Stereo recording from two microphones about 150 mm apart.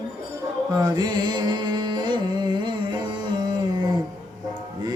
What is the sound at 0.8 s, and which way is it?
Music, 30° right (ahead or behind).